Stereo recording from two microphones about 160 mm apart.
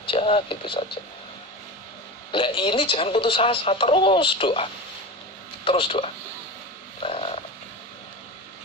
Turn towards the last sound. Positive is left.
turn(degrees=40)  # may be behind; listen again after turning